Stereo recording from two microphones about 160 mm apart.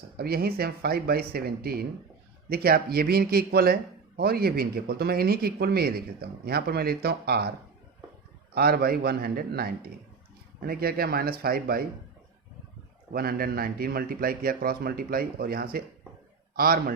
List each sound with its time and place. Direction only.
0.2 s a man's voice: 75° right (ahead or behind)
8.5 s a man's voice: 75° right (ahead or behind)
13.1 s a man's voice: 70° right (ahead or behind)